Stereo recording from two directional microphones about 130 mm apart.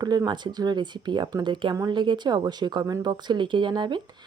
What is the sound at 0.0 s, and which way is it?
Speech, 30° right (ahead or behind).